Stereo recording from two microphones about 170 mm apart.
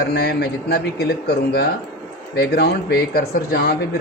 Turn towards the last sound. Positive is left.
turn(degrees=65)  # may be behind; listen again after turning